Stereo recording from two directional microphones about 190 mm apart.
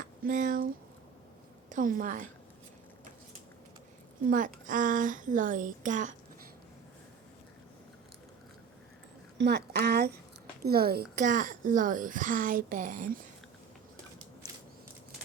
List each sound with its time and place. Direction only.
0.3 s a woman's voice: 45° right (ahead or behind)
1.7 s a woman's voice: 45° right (ahead or behind)
4.3 s a woman's voice: 45° right (ahead or behind)
9.4 s speech: 60° right (ahead or behind)
11.2 s a woman's voice: 45° right (ahead or behind)